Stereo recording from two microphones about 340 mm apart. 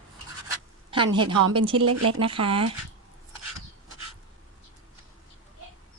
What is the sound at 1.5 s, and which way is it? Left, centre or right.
Speech, centre.